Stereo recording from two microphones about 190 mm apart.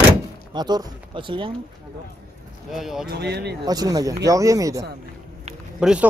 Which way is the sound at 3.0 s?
60° right (ahead or behind).